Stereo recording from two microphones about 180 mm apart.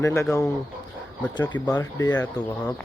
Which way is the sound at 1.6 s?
15° left (ahead or behind).